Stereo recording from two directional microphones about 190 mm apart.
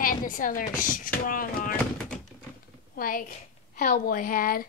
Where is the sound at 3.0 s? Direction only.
45° left (ahead or behind).